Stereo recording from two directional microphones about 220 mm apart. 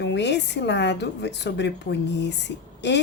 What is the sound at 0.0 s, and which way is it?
Speech, 50° left (ahead or behind).